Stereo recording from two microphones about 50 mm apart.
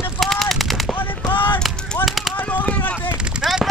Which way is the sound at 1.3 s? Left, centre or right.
Left.